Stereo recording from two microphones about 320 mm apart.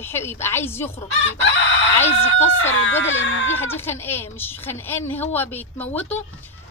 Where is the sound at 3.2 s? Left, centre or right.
Left.